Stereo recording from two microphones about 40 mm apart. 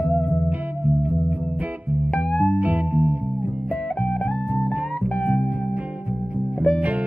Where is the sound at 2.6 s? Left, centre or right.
Right.